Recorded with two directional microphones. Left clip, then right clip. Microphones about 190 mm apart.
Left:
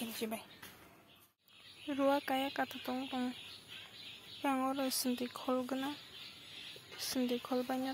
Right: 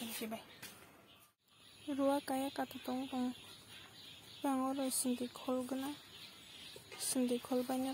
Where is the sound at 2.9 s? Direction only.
10° left (ahead or behind).